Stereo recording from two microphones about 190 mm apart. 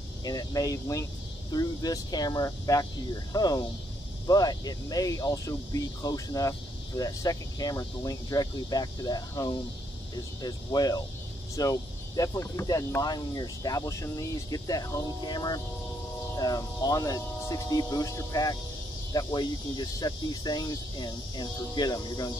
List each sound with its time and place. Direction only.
0.2 s speech: 20° left (ahead or behind)